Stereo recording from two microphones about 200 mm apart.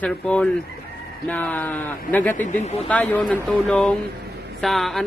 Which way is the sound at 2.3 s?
35° left (ahead or behind).